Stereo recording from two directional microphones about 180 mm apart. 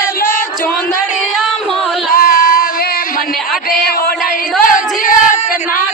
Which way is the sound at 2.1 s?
50° left (ahead or behind).